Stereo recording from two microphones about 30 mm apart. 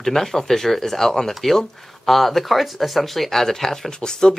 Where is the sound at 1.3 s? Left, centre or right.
Centre.